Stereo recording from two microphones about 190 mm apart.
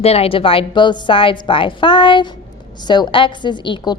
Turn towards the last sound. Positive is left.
turn(degrees=25)  # may be behind; listen again after turning